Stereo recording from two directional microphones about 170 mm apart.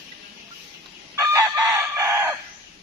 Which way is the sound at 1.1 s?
15° right (ahead or behind).